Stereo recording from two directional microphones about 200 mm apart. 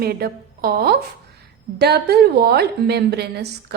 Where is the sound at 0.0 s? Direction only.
50° right (ahead or behind).